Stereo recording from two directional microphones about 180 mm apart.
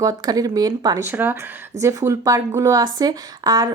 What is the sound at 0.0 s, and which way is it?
Speech, 20° right (ahead or behind).